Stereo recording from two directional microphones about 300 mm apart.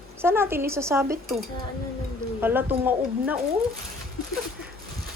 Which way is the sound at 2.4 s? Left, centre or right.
Centre.